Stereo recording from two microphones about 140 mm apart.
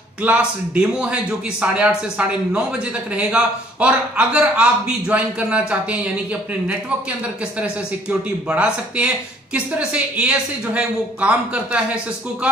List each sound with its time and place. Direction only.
0.2 s speech: 10° right (ahead or behind)
7.6 s speech: 10° right (ahead or behind)